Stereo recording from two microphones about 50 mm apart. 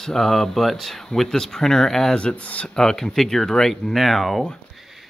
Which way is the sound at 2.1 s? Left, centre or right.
Left.